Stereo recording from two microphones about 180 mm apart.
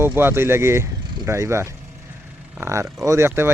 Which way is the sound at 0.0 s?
15° right (ahead or behind).